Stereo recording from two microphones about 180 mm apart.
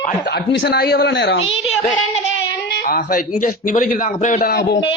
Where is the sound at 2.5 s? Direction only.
70° left (ahead or behind).